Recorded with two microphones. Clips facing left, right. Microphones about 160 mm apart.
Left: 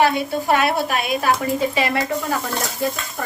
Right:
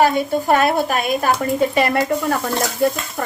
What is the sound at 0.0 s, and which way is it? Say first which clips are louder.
A woman's voice: right 2 dB; 45° right (ahead or behind).